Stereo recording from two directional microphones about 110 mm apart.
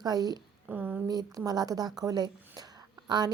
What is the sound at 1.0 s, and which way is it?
A woman's voice, 35° right (ahead or behind).